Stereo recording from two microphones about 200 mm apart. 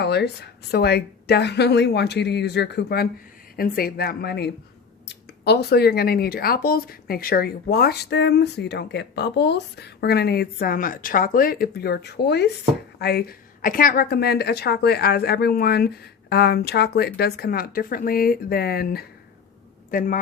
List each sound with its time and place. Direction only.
0.0 s a woman's voice: 55° left (ahead or behind)